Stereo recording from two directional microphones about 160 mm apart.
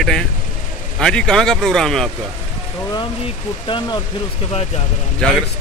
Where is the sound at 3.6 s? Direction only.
30° left (ahead or behind).